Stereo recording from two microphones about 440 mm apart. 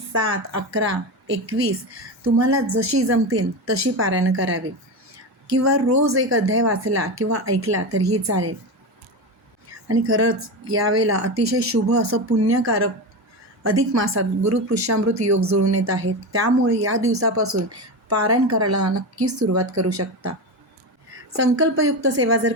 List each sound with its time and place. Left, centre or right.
0.3 s a woman's voice: right
9.9 s a woman's voice: right
21.5 s a woman's voice: right